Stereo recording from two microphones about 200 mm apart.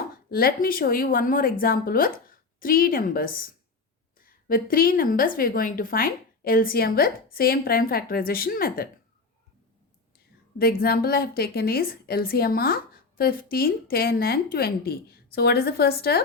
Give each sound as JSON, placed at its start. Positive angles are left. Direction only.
{"t": 0.3, "sound": "a woman's voice", "side_deg": 50}
{"t": 10.6, "sound": "a woman's voice", "side_deg": 50}